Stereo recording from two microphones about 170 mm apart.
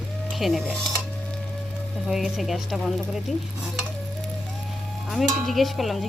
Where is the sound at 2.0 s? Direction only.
Centre (ahead or behind).